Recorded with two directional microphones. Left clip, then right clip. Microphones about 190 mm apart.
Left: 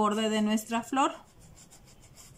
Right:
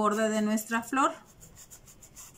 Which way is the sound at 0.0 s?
10° left (ahead or behind).